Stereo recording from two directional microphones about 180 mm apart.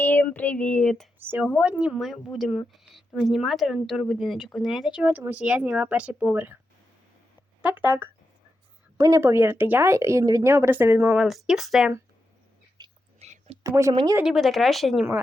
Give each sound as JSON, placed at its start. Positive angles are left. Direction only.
{"t": 0.0, "sound": "a sound", "side_deg": 10}
{"t": 1.2, "sound": "speech", "side_deg": -10}
{"t": 7.6, "sound": "speech", "side_deg": -10}
{"t": 12.8, "sound": "whispering", "side_deg": -25}
{"t": 13.1, "sound": "a sound", "side_deg": -35}
{"t": 13.6, "sound": "speech", "side_deg": -15}
{"t": 14.2, "sound": "speech", "side_deg": 0}